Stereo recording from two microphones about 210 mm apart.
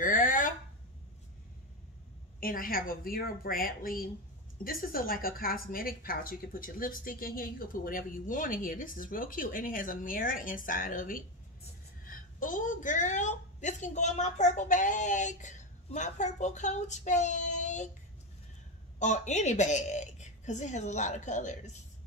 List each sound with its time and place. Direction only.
0.0 s a sound: 40° left (ahead or behind)
2.4 s a woman's voice: 45° left (ahead or behind)
18.9 s a woman's voice: 35° left (ahead or behind)